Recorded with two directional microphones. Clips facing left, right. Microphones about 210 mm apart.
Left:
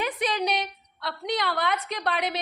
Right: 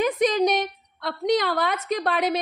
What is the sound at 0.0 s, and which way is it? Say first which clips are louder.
A woman's voice: right 7 dB; 45° right (ahead or behind).